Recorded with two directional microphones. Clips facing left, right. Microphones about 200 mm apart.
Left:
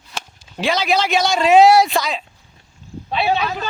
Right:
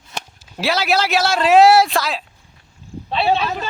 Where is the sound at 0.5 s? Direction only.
5° right (ahead or behind).